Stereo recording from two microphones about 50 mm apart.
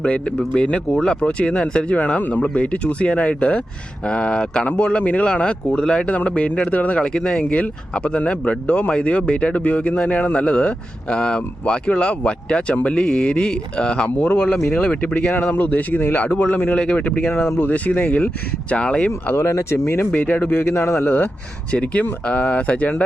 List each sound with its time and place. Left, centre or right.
0.0 s speech: left
2.0 s speech: left
15.5 s a man's voice: left
16.7 s a man's voice: left
17.2 s a man's voice: left
17.6 s speech: left
20.1 s a man's voice: left
20.6 s a man's voice: left
21.7 s speech: left